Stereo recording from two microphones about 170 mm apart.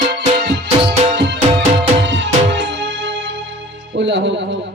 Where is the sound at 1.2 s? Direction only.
90° right.